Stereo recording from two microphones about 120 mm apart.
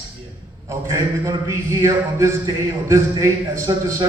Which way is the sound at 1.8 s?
25° right (ahead or behind).